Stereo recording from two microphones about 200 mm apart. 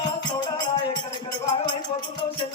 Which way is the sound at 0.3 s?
20° left (ahead or behind).